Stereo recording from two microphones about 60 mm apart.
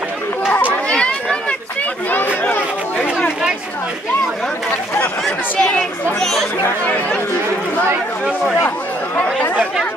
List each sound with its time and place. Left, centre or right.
0.8 s run: centre
2.0 s a sound: left
5.7 s speech: centre
8.6 s speech: left